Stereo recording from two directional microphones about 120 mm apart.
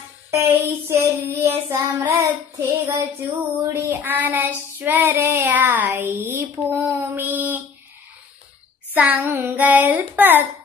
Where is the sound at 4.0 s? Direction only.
15° right (ahead or behind).